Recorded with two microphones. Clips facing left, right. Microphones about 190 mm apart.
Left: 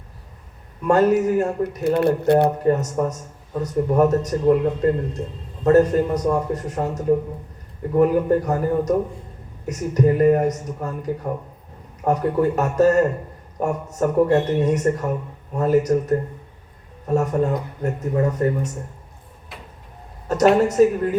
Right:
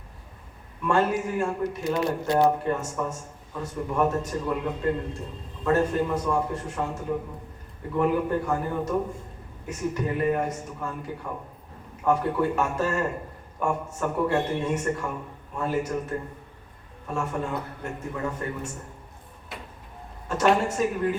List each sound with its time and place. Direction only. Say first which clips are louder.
0.9 s speech: left 8 dB; 40° left (ahead or behind)
1.8 s speech: left 10 dB; 60° left (ahead or behind)
2.6 s speech: left 8 dB; 40° left (ahead or behind)
19.5 s vehicle: right 1 dB; centre (ahead or behind)
20.2 s speech: left 7 dB; 40° left (ahead or behind)